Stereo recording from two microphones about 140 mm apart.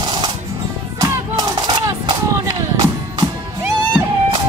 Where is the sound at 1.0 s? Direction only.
25° right (ahead or behind).